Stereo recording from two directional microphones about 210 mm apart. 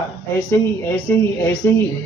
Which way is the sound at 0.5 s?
10° left (ahead or behind).